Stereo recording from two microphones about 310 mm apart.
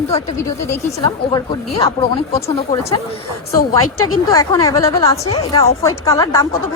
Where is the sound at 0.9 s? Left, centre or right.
Centre.